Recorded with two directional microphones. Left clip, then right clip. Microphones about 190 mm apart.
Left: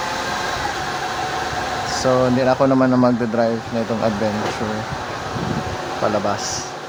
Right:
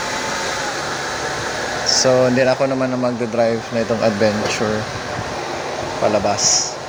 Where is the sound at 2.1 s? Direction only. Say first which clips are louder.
Right 1 dB; centre (ahead or behind).